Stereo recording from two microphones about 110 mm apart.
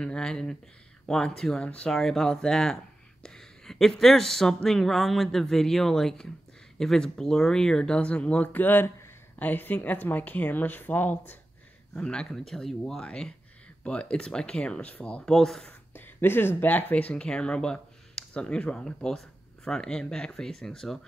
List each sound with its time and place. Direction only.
0.0 s speech: 5° left (ahead or behind)
15.9 s speech: 20° left (ahead or behind)